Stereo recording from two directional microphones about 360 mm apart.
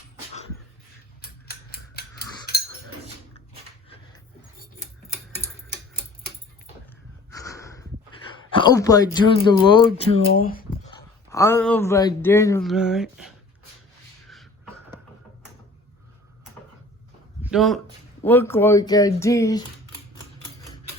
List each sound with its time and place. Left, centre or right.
1.2 s scissors: left
5.0 s tick-tock: centre
7.3 s snort: centre
8.4 s speech: centre
11.3 s speech: centre
14.3 s a sound: centre
17.4 s a sound: centre
18.3 s speech: centre